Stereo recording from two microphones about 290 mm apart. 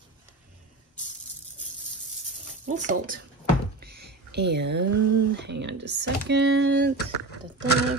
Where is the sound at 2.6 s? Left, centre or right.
Right.